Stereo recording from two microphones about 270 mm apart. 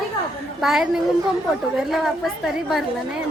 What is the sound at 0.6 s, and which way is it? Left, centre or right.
A woman's voice, centre.